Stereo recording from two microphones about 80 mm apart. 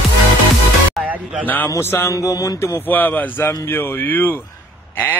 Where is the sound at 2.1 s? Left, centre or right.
Left.